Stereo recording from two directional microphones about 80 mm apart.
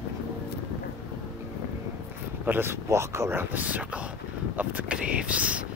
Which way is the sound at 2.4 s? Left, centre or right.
Right.